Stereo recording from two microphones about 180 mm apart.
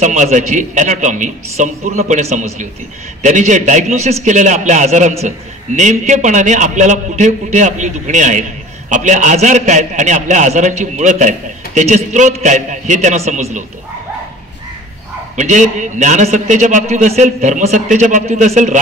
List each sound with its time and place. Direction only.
0.0 s a man's voice: 40° right (ahead or behind)
15.3 s a man's voice: 40° right (ahead or behind)